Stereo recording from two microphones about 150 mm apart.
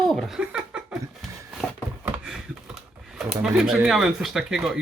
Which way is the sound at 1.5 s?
Centre (ahead or behind).